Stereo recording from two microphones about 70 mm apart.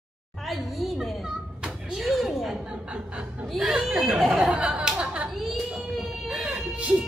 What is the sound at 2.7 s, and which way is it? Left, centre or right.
Chuckle, centre.